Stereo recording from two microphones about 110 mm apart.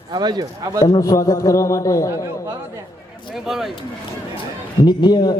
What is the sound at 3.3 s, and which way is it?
Speech, 5° right (ahead or behind).